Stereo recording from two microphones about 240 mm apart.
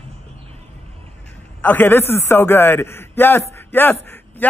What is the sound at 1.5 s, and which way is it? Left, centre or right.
A man's voice, centre.